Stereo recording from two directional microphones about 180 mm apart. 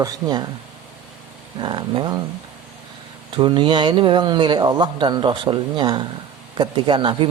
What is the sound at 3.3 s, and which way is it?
Speech, 25° right (ahead or behind).